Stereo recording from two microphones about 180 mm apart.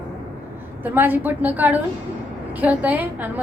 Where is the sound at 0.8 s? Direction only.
10° right (ahead or behind).